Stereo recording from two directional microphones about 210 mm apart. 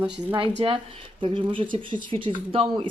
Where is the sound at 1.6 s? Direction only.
40° right (ahead or behind).